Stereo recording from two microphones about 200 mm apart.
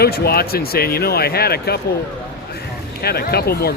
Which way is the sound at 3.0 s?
50° left (ahead or behind).